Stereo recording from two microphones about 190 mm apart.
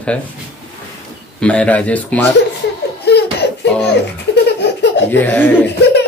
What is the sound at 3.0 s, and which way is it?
Laughter, 60° left (ahead or behind).